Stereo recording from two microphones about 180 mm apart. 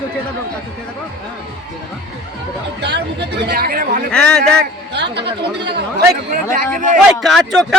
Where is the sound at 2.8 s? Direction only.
70° right (ahead or behind); by 4.0 s 50° right (ahead or behind).